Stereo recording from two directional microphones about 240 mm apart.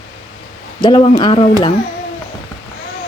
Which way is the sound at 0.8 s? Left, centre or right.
Centre.